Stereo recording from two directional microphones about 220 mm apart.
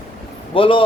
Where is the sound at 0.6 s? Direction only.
25° left (ahead or behind).